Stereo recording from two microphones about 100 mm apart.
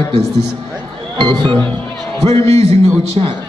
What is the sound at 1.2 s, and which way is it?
Speech, 50° right (ahead or behind).